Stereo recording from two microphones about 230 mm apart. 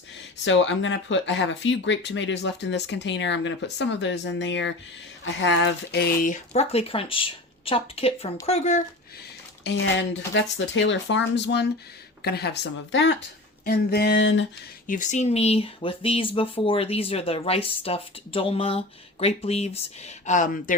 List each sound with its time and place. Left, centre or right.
0.4 s speech: left
9.6 s speech: left
14.8 s speech: left